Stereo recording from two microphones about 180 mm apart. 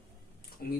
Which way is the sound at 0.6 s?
55° left (ahead or behind).